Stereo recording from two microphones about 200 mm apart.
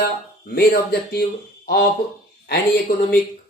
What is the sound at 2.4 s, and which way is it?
Speech, 55° left (ahead or behind).